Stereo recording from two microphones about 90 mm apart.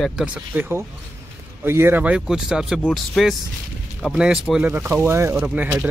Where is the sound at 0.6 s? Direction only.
25° right (ahead or behind).